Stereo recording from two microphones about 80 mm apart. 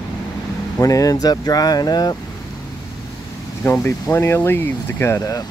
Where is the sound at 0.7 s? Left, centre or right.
Left.